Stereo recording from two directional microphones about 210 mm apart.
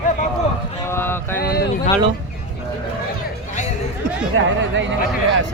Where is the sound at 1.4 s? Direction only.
50° left (ahead or behind).